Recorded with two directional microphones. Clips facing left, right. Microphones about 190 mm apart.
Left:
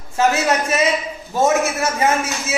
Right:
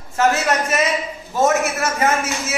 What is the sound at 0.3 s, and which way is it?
A man's voice, 15° left (ahead or behind).